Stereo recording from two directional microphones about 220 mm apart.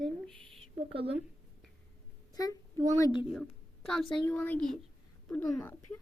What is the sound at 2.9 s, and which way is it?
Speech, 15° left (ahead or behind).